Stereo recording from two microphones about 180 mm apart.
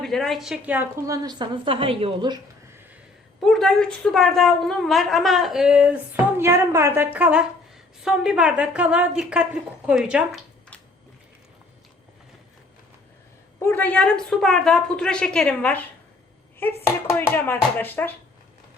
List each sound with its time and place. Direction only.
0.0 s a woman's voice: centre (ahead or behind); by 2.4 s 30° right (ahead or behind)
3.4 s a woman's voice: centre (ahead or behind)
13.6 s a woman's voice: 10° left (ahead or behind)